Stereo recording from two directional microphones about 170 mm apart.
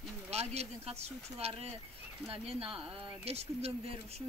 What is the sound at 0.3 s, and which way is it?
Speech, 40° right (ahead or behind).